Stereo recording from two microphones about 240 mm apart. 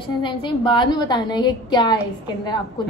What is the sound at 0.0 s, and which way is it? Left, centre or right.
A woman's voice, centre.